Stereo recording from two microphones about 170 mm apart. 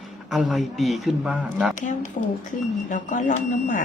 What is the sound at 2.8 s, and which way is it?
Speech, 50° left (ahead or behind).